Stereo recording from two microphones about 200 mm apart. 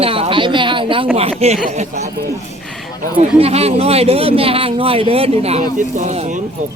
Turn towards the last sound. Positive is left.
turn(degrees=-35)  # may be behind; listen again after turning